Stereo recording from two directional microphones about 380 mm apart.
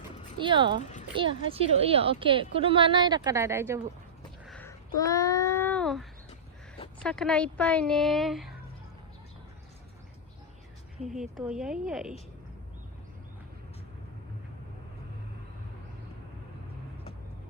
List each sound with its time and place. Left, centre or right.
0.3 s a woman's voice: centre
0.8 s a child's voice: centre
1.1 s a woman's voice: centre
4.4 s a sound: centre
7.0 s a woman's voice: centre
11.0 s a woman's voice: centre